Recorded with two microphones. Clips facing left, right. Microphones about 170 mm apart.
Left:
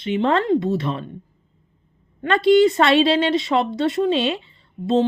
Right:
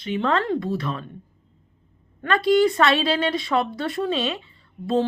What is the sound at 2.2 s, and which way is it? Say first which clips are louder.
A woman's voice: left 4 dB; 25° left (ahead or behind).